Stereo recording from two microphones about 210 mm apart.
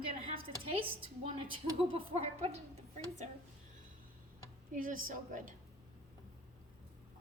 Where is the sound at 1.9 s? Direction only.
30° right (ahead or behind).